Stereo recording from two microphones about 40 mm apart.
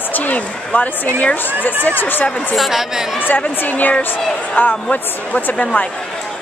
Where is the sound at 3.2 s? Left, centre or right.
Left.